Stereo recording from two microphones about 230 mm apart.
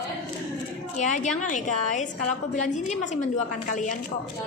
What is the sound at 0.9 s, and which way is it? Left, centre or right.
A woman's voice, left.